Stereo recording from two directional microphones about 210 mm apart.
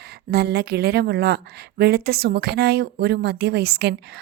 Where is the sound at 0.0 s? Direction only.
50° right (ahead or behind).